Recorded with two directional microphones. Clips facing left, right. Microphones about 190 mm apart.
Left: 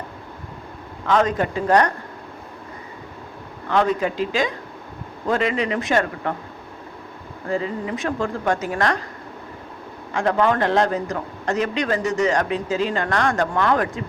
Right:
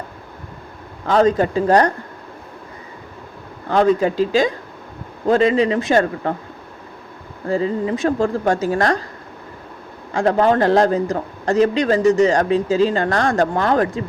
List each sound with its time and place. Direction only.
1.0 s speech: 35° right (ahead or behind)
3.7 s speech: 35° right (ahead or behind)
7.4 s speech: 30° right (ahead or behind)
10.1 s speech: 35° right (ahead or behind)